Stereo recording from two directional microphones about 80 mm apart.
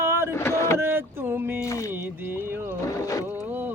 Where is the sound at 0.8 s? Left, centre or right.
Right.